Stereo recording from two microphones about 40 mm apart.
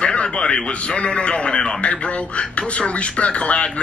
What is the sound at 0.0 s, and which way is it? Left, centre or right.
Speech, left.